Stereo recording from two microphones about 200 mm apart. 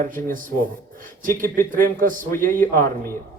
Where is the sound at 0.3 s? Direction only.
45° right (ahead or behind).